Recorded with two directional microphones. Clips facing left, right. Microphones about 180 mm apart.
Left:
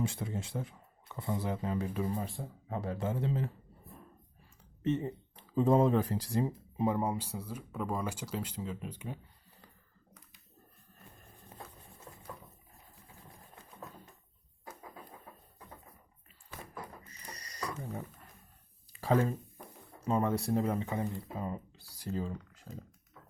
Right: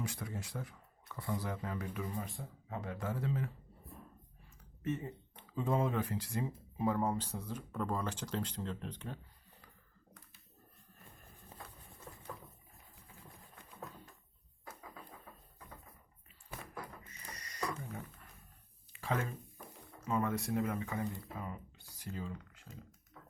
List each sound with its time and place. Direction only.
0.0 s speech: 25° left (ahead or behind)
4.8 s speech: 30° left (ahead or behind)
6.8 s speech: 15° left (ahead or behind)
17.1 s a sound: 35° left (ahead or behind)
18.9 s a sound: 35° left (ahead or behind)
20.0 s speech: 30° left (ahead or behind)